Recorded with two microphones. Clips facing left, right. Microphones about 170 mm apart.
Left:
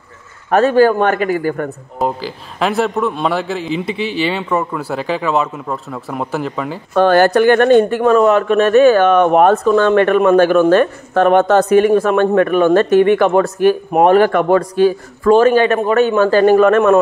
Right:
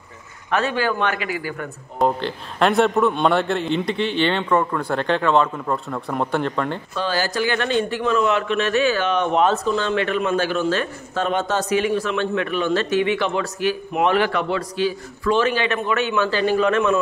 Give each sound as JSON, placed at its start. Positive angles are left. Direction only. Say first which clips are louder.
{"t": 0.5, "sound": "a man's voice", "louder": "left 11 dB", "side_deg": 45}
{"t": 2.0, "sound": "a man's voice", "louder": "even", "side_deg": 5}
{"t": 6.9, "sound": "a man's voice", "louder": "left 13 dB", "side_deg": 60}